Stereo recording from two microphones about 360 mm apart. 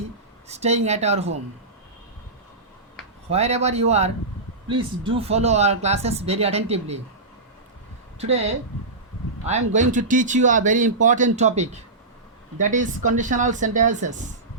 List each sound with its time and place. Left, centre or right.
0.4 s speech: centre
3.2 s speech: centre
8.2 s speech: centre